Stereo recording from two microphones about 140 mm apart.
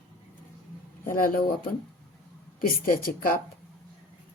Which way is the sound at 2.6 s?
85° left.